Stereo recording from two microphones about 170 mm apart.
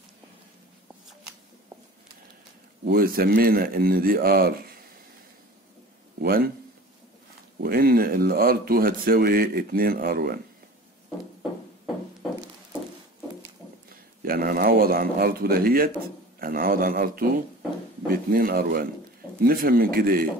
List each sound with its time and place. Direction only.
2.8 s speech: 65° right (ahead or behind)
6.1 s a man's voice: 65° right (ahead or behind)
7.6 s speech: 60° right (ahead or behind)
14.2 s speech: 60° right (ahead or behind)